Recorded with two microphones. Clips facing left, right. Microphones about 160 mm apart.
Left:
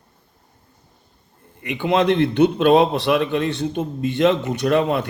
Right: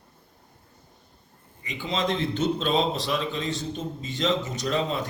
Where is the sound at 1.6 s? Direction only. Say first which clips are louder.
Left 10 dB; 65° left (ahead or behind).